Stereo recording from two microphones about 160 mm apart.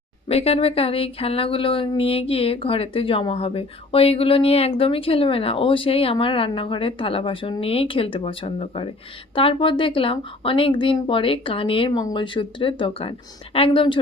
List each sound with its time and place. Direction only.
0.3 s speech: 40° left (ahead or behind)